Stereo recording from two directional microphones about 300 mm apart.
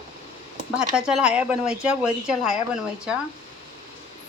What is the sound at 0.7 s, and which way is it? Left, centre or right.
Speech, centre.